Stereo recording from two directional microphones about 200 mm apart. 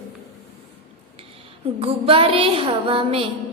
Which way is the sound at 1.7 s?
25° right (ahead or behind).